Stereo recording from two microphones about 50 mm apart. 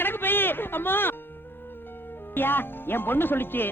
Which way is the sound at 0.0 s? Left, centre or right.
Left.